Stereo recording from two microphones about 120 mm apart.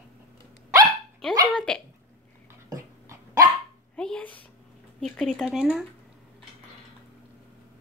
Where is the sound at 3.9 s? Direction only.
5° left (ahead or behind).